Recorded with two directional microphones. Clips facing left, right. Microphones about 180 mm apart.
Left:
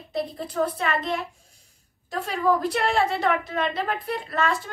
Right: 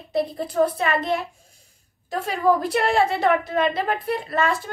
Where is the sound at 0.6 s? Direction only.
20° right (ahead or behind).